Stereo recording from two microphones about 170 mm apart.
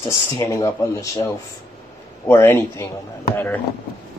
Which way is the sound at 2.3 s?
15° left (ahead or behind).